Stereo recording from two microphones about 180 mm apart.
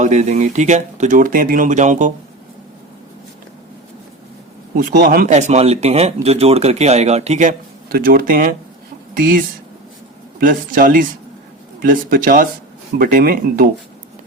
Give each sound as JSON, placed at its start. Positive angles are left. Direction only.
{"t": 0.0, "sound": "speech", "side_deg": -40}
{"t": 4.8, "sound": "a man's voice", "side_deg": -50}
{"t": 7.9, "sound": "speech", "side_deg": -55}
{"t": 10.4, "sound": "speech", "side_deg": -50}